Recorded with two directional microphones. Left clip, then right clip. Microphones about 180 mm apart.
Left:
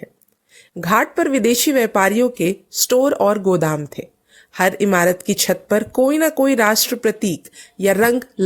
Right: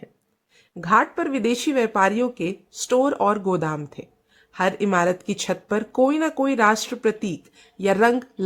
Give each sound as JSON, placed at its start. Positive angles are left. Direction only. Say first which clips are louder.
{"t": 0.5, "sound": "speech", "louder": "left 2 dB", "side_deg": 30}